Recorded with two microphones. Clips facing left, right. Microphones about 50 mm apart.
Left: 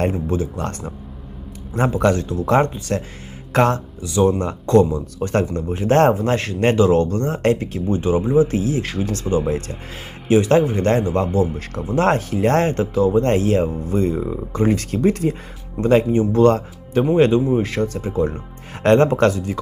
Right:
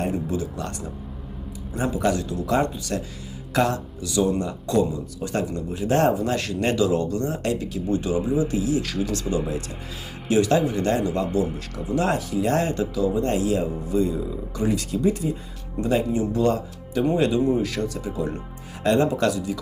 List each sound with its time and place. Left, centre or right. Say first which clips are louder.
0.1 s speech: left 4 dB; left
1.7 s speech: left 5 dB; left
4.0 s speech: left 5 dB; left
10.2 s speech: left 5 dB; left
18.8 s speech: left 6 dB; left